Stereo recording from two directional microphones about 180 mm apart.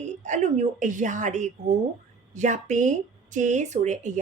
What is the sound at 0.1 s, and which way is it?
A woman's voice, 40° right (ahead or behind).